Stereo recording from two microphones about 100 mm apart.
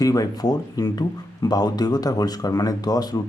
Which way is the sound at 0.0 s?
35° left (ahead or behind).